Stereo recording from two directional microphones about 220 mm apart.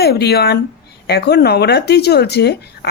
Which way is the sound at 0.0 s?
45° left (ahead or behind).